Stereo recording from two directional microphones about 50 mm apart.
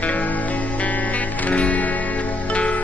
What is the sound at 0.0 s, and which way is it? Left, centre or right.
Music, left.